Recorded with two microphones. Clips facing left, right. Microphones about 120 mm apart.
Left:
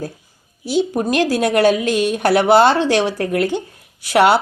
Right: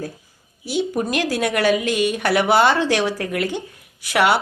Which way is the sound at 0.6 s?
30° left (ahead or behind).